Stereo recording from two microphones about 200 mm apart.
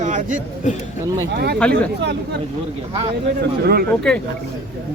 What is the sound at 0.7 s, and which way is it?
Speech, 40° left (ahead or behind).